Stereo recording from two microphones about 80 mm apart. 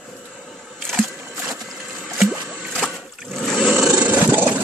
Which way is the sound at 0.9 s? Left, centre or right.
Centre.